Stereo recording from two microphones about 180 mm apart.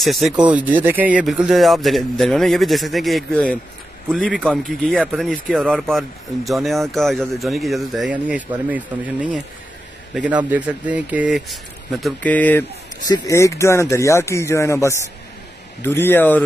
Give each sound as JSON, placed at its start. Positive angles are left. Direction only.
{"t": 0.0, "sound": "speech", "side_deg": 0}